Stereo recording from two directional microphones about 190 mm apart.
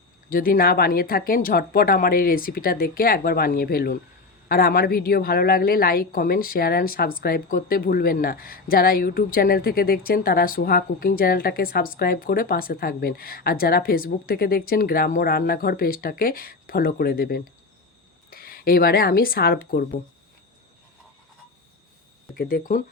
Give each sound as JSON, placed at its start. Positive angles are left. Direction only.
{"t": 0.3, "sound": "a woman's voice", "side_deg": 50}
{"t": 22.4, "sound": "a woman's voice", "side_deg": 50}